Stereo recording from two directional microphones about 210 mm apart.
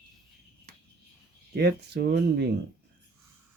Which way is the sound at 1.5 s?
50° right (ahead or behind).